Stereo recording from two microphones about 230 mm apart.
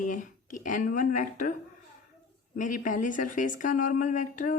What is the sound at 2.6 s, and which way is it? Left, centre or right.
Speech, left.